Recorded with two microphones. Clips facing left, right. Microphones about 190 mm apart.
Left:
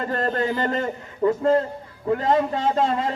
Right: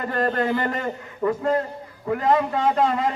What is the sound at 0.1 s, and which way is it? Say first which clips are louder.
Speech: right 3 dB; 25° left (ahead or behind).